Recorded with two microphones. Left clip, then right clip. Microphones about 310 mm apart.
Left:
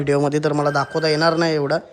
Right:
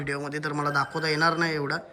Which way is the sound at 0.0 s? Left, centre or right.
Centre.